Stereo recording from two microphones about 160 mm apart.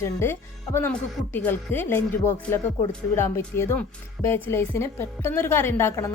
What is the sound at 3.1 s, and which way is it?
A woman's voice, 15° left (ahead or behind).